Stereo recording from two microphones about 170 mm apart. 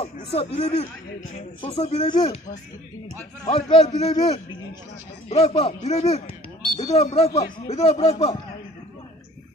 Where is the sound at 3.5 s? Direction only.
35° left (ahead or behind).